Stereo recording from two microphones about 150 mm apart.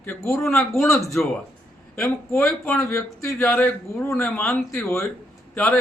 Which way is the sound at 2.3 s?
15° left (ahead or behind).